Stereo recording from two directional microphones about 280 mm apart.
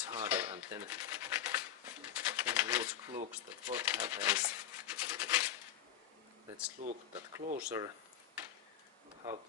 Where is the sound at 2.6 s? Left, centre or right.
Centre.